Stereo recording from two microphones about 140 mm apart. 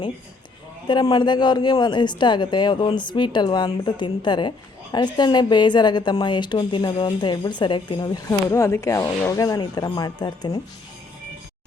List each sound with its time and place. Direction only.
0.9 s speech: 30° left (ahead or behind)